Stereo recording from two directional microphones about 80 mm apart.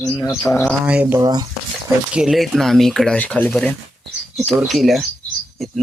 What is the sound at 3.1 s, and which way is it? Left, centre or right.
Speech, centre.